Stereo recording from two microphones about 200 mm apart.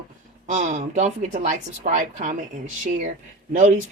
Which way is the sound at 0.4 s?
35° right (ahead or behind).